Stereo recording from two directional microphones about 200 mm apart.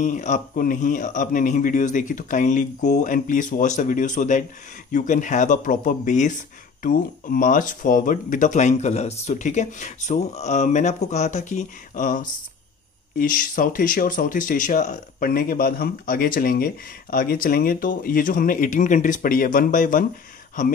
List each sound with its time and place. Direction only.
0.0 s speech: 40° left (ahead or behind)